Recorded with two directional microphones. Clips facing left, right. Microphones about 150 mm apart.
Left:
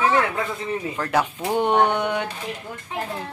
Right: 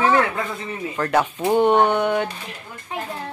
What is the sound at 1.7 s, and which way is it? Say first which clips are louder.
Speech: right 2 dB; 10° right (ahead or behind).